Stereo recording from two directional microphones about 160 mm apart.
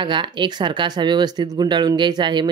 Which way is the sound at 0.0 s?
30° right (ahead or behind).